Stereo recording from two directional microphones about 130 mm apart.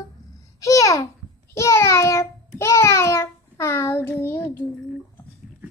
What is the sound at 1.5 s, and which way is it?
Child singing, 20° left (ahead or behind).